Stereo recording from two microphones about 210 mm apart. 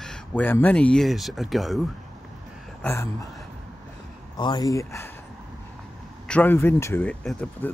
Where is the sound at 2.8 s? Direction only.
15° left (ahead or behind).